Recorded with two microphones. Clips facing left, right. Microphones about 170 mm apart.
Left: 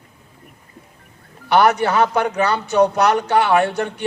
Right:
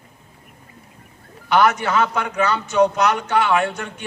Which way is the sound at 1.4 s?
35° left (ahead or behind).